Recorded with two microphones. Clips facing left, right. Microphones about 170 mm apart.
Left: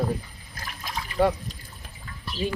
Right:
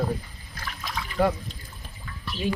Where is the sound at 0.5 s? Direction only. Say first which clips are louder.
Right 2 dB; 40° left (ahead or behind).